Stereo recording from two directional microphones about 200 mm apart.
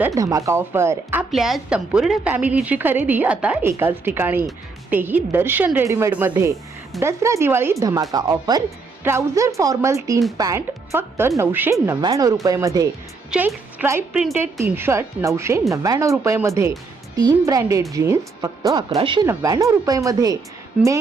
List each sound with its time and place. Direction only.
0.0 s a woman's voice: 15° right (ahead or behind)
1.3 s a woman's voice: centre (ahead or behind); by 20.4 s 20° right (ahead or behind)